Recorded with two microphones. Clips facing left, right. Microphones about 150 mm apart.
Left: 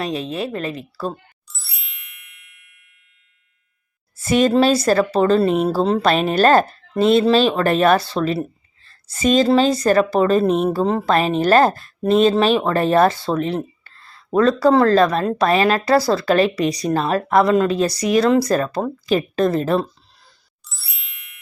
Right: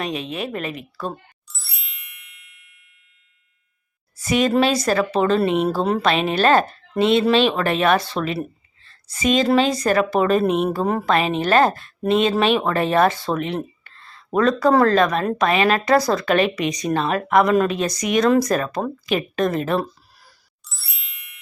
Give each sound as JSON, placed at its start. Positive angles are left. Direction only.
{"t": 0.0, "sound": "speech", "side_deg": 35}
{"t": 1.0, "sound": "ding", "side_deg": 0}
{"t": 4.2, "sound": "speech", "side_deg": 30}
{"t": 11.1, "sound": "speech", "side_deg": 40}
{"t": 13.8, "sound": "a sound", "side_deg": 35}
{"t": 14.3, "sound": "speech", "side_deg": 30}
{"t": 20.7, "sound": "ding", "side_deg": 0}